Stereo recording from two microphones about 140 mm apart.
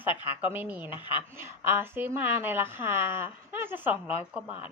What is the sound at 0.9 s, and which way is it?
Speech, 35° left (ahead or behind).